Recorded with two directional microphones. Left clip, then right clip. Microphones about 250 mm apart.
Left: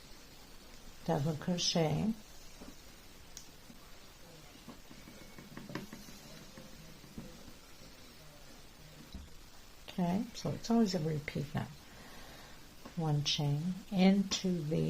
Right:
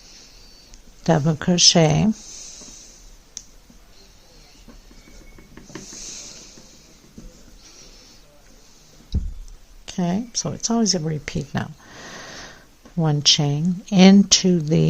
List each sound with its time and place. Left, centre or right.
1.0 s speech: right
9.8 s speech: right
13.0 s speech: right